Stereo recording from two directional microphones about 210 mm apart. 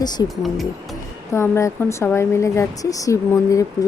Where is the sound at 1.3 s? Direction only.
15° left (ahead or behind).